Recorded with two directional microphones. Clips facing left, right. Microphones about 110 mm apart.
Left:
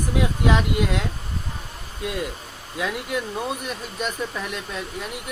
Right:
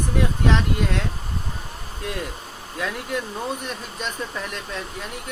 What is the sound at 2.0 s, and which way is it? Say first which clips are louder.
Speech: left 2 dB; 5° left (ahead or behind).